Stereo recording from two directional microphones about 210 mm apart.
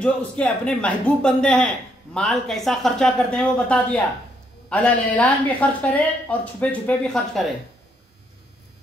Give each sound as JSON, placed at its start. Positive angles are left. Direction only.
{"t": 0.4, "sound": "a woman's voice", "side_deg": 5}